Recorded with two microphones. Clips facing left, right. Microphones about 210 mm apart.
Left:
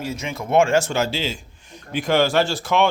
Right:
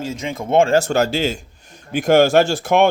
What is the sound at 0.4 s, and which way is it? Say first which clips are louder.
Speech: right 2 dB; 30° right (ahead or behind).